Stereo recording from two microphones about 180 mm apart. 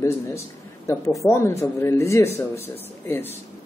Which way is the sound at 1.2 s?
15° left (ahead or behind).